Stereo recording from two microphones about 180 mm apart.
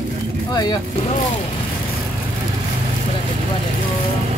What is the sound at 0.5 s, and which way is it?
Speech, 20° left (ahead or behind).